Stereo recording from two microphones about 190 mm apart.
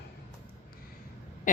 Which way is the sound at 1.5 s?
45° left (ahead or behind).